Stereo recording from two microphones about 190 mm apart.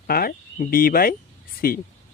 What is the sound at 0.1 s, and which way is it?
Speech, 50° left (ahead or behind).